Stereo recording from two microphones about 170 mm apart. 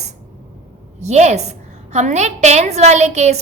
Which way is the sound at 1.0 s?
40° right (ahead or behind).